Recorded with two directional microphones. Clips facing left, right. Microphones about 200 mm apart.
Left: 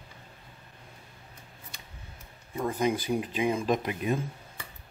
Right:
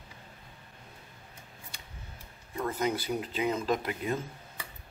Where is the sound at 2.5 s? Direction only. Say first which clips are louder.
Left 3 dB; 15° left (ahead or behind).